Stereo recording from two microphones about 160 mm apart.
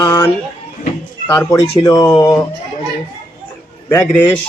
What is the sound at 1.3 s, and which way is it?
Speech, 20° left (ahead or behind).